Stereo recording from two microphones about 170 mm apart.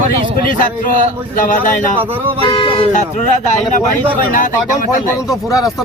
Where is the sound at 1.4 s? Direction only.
50° left (ahead or behind).